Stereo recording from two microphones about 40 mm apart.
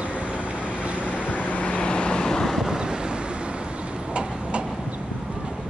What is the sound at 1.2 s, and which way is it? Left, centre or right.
Vehicle, left.